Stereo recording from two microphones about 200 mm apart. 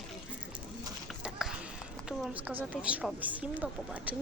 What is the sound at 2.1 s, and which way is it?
Speech, 5° right (ahead or behind).